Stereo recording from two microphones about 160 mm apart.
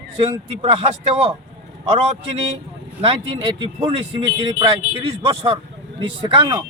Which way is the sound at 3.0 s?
35° right (ahead or behind).